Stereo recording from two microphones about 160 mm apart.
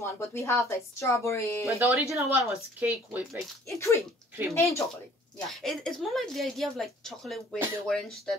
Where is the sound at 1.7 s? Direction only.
15° right (ahead or behind).